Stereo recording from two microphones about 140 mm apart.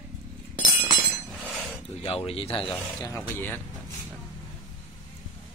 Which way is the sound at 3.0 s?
20° left (ahead or behind).